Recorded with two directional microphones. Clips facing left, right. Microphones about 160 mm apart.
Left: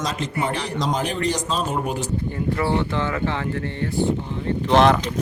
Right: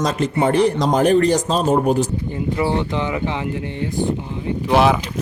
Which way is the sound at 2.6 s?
15° right (ahead or behind).